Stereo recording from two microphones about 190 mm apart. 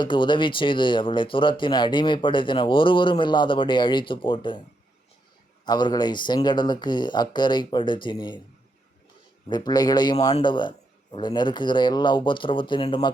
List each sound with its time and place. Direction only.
0.0 s speech: 25° left (ahead or behind)
5.6 s speech: 20° left (ahead or behind)
9.5 s speech: 20° left (ahead or behind)